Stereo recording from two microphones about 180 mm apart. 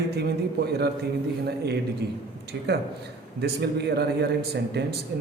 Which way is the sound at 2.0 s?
65° right (ahead or behind).